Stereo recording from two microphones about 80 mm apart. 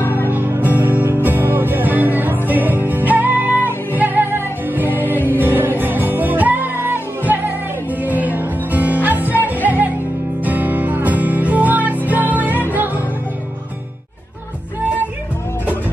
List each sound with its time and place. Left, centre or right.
0.0 s music: left
0.3 s music: right
5.1 s music: left
5.4 s music: right